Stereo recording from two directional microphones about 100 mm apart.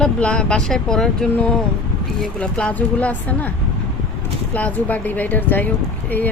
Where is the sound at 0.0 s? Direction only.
10° left (ahead or behind).